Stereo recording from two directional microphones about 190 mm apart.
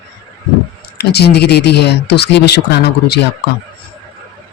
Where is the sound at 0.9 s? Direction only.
60° left (ahead or behind).